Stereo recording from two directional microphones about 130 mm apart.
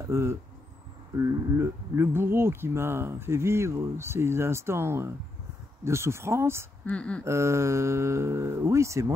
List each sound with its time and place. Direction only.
0.0 s speech: 20° right (ahead or behind)
6.9 s speech: 10° left (ahead or behind)
7.2 s speech: 20° right (ahead or behind)